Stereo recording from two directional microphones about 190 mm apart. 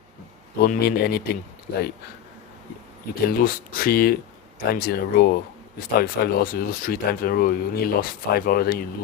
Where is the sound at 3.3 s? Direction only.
50° left (ahead or behind).